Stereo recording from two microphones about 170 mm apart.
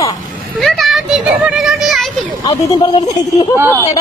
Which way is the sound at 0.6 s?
Centre (ahead or behind).